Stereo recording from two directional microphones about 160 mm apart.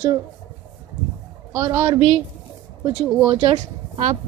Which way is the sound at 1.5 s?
20° right (ahead or behind).